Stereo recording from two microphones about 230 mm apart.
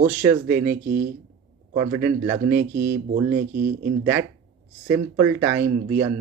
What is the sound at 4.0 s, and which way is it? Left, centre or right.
Speech, centre.